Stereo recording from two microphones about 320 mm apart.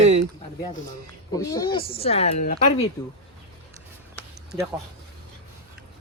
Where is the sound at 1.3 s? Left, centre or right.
Centre.